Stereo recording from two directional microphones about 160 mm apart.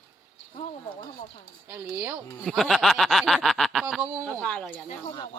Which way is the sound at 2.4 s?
Centre (ahead or behind).